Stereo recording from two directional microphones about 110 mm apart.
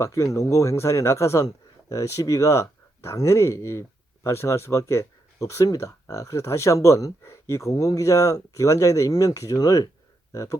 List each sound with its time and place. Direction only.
0.0 s a man's voice: 30° left (ahead or behind)